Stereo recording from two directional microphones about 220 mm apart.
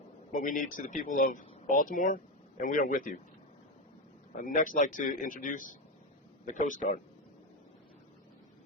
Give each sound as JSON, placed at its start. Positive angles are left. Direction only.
{"t": 0.3, "sound": "speech", "side_deg": 35}
{"t": 4.4, "sound": "a man's voice", "side_deg": 35}